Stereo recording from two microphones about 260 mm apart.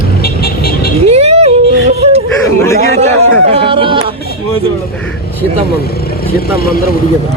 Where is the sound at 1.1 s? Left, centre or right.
Right.